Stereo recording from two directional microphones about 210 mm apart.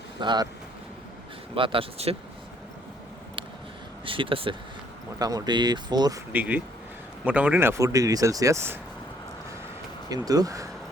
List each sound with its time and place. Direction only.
0.2 s speech: 20° right (ahead or behind)
1.5 s speech: 25° right (ahead or behind)
4.0 s speech: 25° right (ahead or behind)
6.3 s speech: 10° right (ahead or behind)
10.1 s speech: 15° right (ahead or behind)